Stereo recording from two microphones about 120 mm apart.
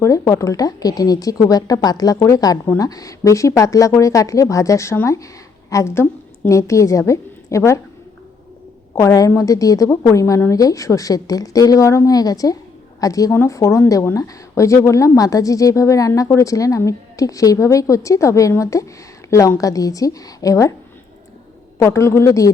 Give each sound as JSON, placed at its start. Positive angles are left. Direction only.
{"t": 0.0, "sound": "a woman's voice", "side_deg": 25}
{"t": 9.0, "sound": "a woman's voice", "side_deg": 25}
{"t": 21.8, "sound": "a woman's voice", "side_deg": 25}